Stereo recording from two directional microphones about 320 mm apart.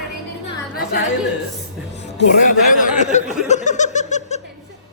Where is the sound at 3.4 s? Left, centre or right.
Left.